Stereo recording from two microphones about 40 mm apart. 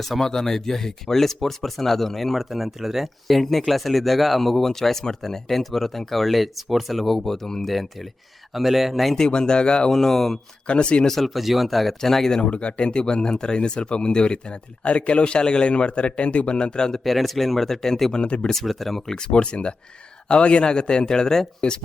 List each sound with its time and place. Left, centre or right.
0.0 s speech: centre
7.6 s speech: centre
9.1 s speech: centre
9.9 s speech: centre
10.7 s speech: left
11.1 s speech: centre
12.4 s speech: left
16.6 s speech: left
17.0 s speech: centre
18.6 s speech: centre
19.1 s speech: left